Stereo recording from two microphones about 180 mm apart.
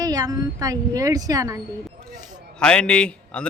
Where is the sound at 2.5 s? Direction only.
5° left (ahead or behind).